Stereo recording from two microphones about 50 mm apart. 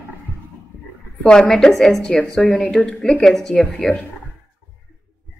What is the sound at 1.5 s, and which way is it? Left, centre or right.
Speech, centre.